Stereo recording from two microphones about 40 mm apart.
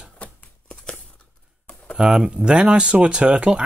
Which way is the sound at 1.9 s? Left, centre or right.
Centre.